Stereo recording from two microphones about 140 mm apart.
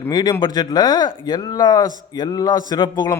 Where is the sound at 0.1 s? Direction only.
30° left (ahead or behind).